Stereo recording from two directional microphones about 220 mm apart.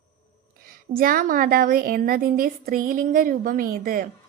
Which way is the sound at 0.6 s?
40° right (ahead or behind).